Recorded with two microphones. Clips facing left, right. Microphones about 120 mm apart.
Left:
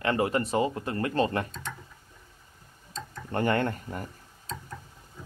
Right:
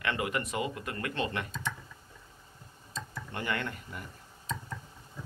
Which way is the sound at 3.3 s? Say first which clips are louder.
Left 9 dB; 45° left (ahead or behind).